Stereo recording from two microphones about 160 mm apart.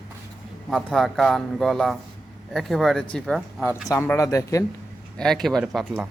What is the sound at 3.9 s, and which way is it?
Speech, 15° left (ahead or behind).